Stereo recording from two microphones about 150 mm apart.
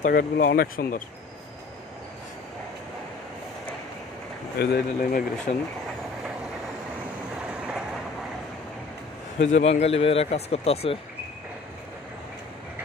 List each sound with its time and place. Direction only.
0.0 s speech: 80° left
4.5 s speech: 90° left
9.5 s speech: 50° left (ahead or behind)